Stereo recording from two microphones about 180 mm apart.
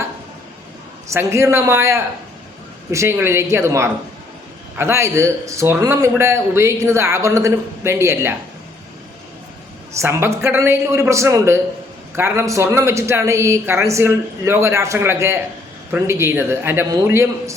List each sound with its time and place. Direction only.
1.1 s a man's voice: 15° right (ahead or behind)
10.0 s a man's voice: 15° right (ahead or behind)